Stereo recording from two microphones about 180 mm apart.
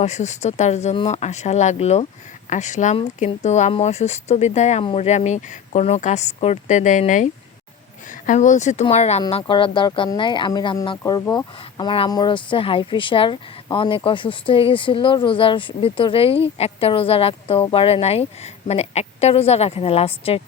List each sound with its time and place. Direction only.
0.0 s speech: 40° left (ahead or behind)
9.2 s speech: 25° left (ahead or behind)